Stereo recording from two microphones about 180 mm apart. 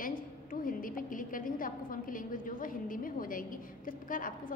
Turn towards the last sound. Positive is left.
turn(degrees=50)  # may be behind; listen again after turning